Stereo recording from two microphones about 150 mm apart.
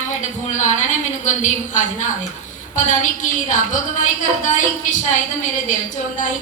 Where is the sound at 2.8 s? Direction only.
55° left (ahead or behind).